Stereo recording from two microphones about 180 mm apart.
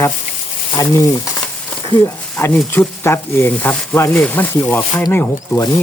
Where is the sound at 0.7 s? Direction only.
20° left (ahead or behind).